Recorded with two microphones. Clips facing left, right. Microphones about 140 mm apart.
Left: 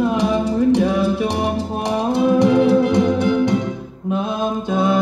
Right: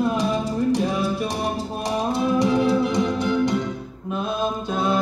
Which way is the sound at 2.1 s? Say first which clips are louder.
Left 6 dB; 60° left (ahead or behind).